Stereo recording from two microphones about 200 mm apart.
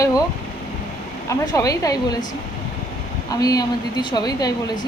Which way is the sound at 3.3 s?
20° left (ahead or behind).